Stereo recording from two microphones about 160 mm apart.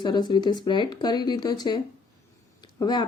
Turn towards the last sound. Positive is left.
turn(degrees=25)  # may be behind; listen again after turning